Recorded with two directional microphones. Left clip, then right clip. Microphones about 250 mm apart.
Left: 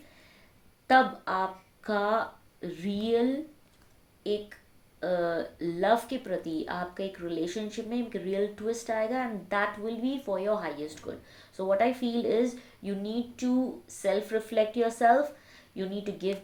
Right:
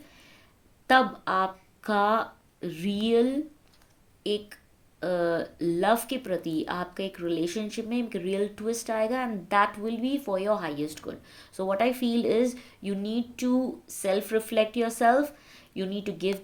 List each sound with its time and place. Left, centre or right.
0.9 s speech: right